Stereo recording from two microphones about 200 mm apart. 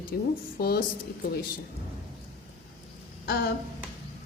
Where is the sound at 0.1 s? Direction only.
50° left (ahead or behind).